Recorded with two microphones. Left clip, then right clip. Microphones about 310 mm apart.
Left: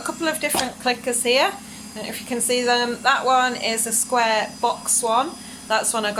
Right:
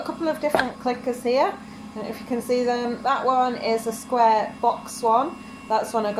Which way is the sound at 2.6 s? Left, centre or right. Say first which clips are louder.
Left 4 dB; left.